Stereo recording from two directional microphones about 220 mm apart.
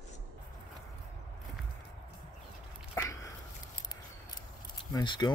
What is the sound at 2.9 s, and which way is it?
Dog, 15° left (ahead or behind).